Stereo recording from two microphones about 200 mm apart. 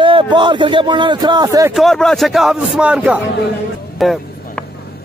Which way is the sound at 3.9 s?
Centre (ahead or behind).